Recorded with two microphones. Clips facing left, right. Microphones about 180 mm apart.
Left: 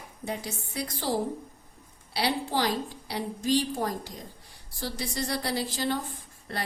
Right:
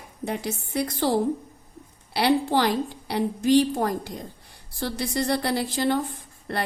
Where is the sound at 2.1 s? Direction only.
60° right (ahead or behind).